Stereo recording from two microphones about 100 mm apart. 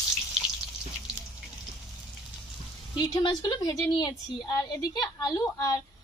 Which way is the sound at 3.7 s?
40° left (ahead or behind).